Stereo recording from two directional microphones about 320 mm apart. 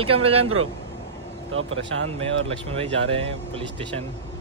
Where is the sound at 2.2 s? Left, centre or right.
Centre.